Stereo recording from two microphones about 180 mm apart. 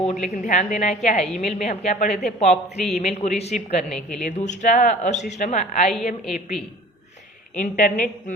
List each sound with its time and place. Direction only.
0.0 s a woman's voice: 40° left (ahead or behind)
1.2 s a woman's voice: centre (ahead or behind)
1.5 s speech: 40° left (ahead or behind)
3.8 s a woman's voice: 5° left (ahead or behind)
4.2 s a woman's voice: 40° left (ahead or behind)
7.5 s a woman's voice: 45° left (ahead or behind)